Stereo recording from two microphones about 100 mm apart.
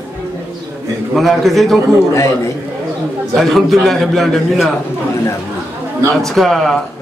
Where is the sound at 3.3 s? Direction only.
Centre (ahead or behind).